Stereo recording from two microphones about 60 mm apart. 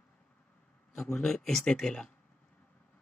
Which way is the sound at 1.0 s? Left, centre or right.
Centre.